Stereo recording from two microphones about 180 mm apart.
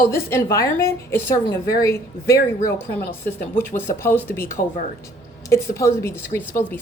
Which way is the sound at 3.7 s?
15° left (ahead or behind).